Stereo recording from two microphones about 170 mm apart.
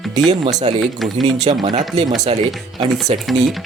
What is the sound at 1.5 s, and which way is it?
Speech, 40° right (ahead or behind).